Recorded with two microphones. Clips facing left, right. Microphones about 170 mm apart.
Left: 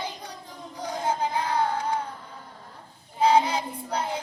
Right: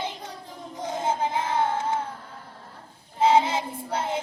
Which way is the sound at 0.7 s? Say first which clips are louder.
Right 1 dB; 25° right (ahead or behind).